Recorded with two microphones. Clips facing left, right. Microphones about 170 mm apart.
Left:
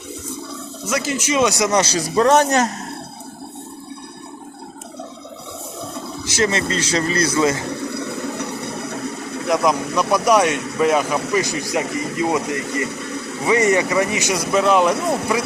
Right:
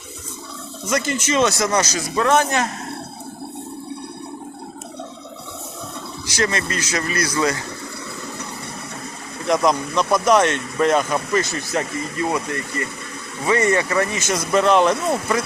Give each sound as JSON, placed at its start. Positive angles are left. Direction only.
{"t": 0.9, "sound": "speech", "side_deg": 5}
{"t": 1.8, "sound": "speech", "side_deg": 30}
{"t": 6.2, "sound": "speech", "side_deg": 25}
{"t": 9.5, "sound": "speech", "side_deg": 5}
{"t": 13.4, "sound": "speech", "side_deg": 15}